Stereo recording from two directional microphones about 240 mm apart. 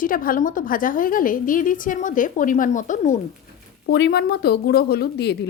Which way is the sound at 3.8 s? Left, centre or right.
Left.